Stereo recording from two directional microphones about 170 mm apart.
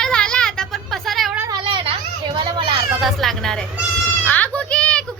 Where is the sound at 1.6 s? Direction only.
30° right (ahead or behind).